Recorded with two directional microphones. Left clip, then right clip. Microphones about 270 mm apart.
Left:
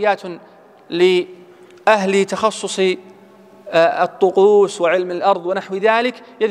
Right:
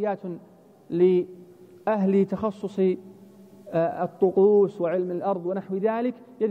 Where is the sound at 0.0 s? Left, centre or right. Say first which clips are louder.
Left 11 dB; centre.